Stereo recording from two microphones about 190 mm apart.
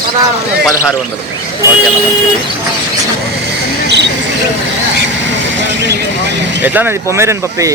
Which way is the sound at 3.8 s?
65° right (ahead or behind).